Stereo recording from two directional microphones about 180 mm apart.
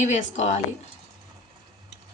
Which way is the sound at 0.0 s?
40° left (ahead or behind).